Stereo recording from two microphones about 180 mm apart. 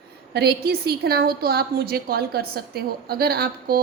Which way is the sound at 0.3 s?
60° right (ahead or behind).